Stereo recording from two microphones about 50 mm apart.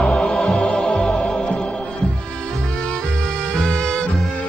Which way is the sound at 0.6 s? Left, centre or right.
Left.